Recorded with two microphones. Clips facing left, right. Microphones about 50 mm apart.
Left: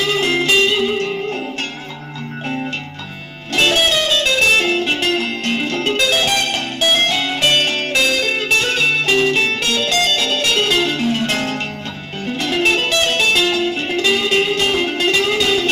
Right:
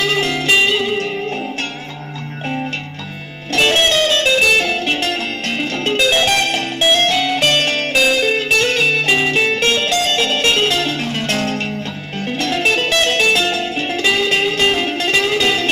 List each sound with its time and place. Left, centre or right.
0.5 s music: centre
3.5 s music: centre
4.6 s music: centre
5.5 s music: centre
7.9 s music: centre
9.0 s music: centre
9.6 s music: right
10.9 s music: left
12.4 s music: centre
12.6 s music: centre